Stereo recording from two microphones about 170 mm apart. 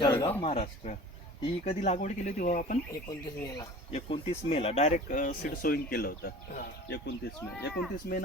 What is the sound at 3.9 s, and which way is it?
Speech, 35° left (ahead or behind).